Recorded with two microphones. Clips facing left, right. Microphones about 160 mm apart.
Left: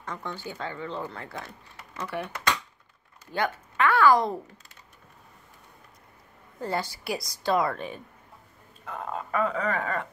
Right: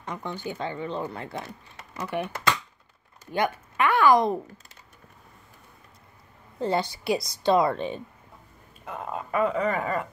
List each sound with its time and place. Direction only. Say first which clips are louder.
0.0 s speech: right 3 dB; 15° right (ahead or behind)
6.6 s speech: right 4 dB; 20° right (ahead or behind)
8.8 s speech: right 1 dB; 5° right (ahead or behind)